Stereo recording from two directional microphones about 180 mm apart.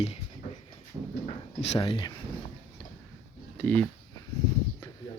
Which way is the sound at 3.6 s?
10° left (ahead or behind).